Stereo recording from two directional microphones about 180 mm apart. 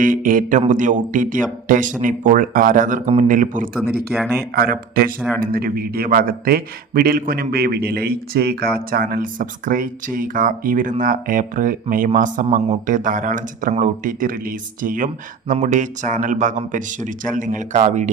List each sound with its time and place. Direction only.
0.0 s a man's voice: 50° right (ahead or behind)
4.1 s speech: 10° right (ahead or behind)
4.5 s a man's voice: 55° right (ahead or behind)